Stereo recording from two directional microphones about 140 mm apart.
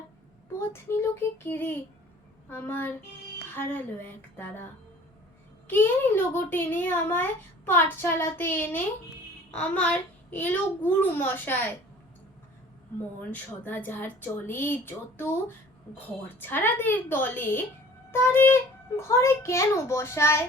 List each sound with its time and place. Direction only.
0.7 s a woman's voice: 20° left (ahead or behind)
5.6 s speech: 15° left (ahead or behind)
9.5 s child singing: 10° left (ahead or behind)
10.8 s speech: 15° left (ahead or behind)
13.3 s a child's voice: 15° left (ahead or behind)